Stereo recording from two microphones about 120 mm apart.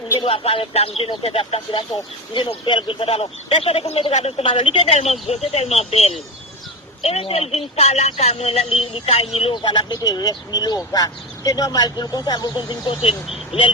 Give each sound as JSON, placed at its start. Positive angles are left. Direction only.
{"t": 0.2, "sound": "a man's voice", "side_deg": 50}